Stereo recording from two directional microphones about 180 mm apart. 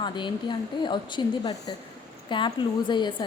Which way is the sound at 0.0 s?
25° left (ahead or behind).